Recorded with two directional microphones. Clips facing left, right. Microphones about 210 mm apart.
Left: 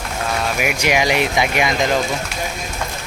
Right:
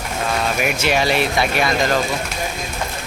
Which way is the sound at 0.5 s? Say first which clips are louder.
Left 2 dB; 10° left (ahead or behind).